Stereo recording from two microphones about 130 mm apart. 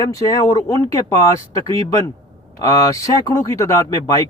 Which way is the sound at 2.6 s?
25° left (ahead or behind).